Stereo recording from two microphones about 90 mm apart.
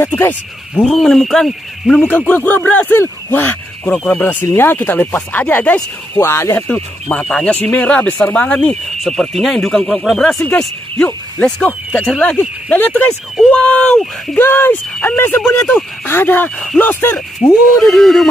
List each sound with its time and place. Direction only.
0.2 s speech: 20° left (ahead or behind)
0.8 s speech: 5° left (ahead or behind)
2.0 s speech: 20° left (ahead or behind)
6.1 s speech: 30° left (ahead or behind)
6.7 s speech: 10° left (ahead or behind)
11.3 s speech: 10° left (ahead or behind)
14.3 s speech: 25° left (ahead or behind)
16.5 s speech: 10° left (ahead or behind)
16.8 s speech: 20° left (ahead or behind)
17.7 s speech: 5° left (ahead or behind)